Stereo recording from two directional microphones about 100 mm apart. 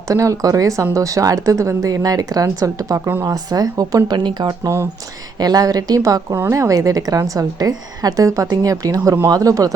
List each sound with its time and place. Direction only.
0.1 s a woman's voice: 35° right (ahead or behind)